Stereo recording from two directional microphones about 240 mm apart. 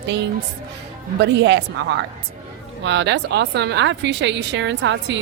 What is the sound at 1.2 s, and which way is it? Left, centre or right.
A woman's voice, right.